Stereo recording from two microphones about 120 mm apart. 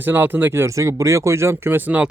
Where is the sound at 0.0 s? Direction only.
15° right (ahead or behind).